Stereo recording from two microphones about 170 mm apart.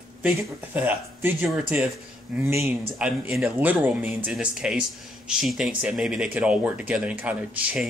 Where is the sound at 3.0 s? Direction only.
5° right (ahead or behind).